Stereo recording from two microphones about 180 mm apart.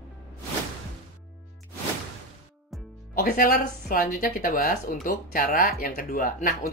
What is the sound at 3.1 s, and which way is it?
Speech, 50° left (ahead or behind).